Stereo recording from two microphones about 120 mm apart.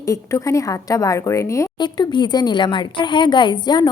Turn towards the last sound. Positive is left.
turn(degrees=35)  # may be behind; listen again after turning